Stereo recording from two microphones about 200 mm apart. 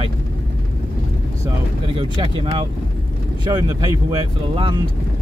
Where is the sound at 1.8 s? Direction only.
25° right (ahead or behind).